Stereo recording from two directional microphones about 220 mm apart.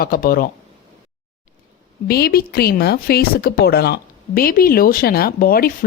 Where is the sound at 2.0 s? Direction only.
45° left (ahead or behind).